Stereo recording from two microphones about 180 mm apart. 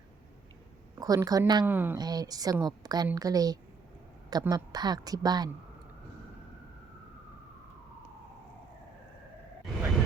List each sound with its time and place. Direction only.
0.9 s a woman's voice: 20° right (ahead or behind)
1.6 s speech: 10° right (ahead or behind)
2.0 s a woman's voice: 20° right (ahead or behind)